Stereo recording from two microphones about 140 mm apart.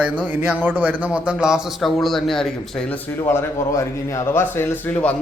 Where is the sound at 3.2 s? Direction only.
15° left (ahead or behind).